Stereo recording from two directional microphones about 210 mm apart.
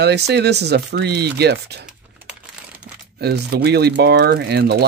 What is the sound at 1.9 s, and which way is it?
Crumpling, 5° right (ahead or behind).